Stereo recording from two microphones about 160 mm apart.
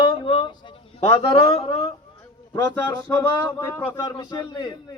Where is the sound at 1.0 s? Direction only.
30° left (ahead or behind).